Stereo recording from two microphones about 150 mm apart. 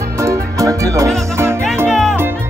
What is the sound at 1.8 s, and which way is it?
Music, centre (ahead or behind).